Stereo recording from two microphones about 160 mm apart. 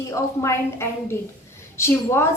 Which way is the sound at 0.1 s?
15° left (ahead or behind).